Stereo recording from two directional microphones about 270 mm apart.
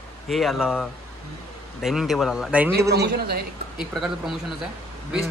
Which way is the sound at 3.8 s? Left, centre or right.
Centre.